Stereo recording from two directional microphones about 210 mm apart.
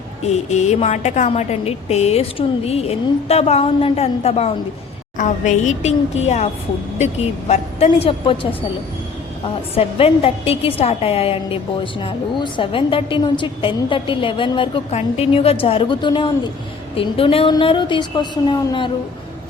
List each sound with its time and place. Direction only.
0.2 s a woman's voice: 30° left (ahead or behind)
9.7 s a woman's voice: 30° left (ahead or behind)